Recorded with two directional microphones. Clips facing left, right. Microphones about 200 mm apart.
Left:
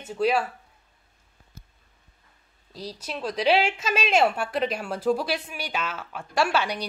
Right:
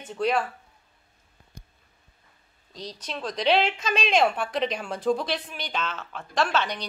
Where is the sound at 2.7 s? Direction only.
10° left (ahead or behind).